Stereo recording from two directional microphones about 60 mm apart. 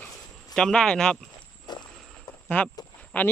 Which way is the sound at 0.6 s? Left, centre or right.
Centre.